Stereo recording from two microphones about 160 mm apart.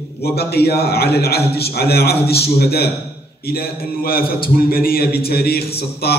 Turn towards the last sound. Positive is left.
turn(degrees=80)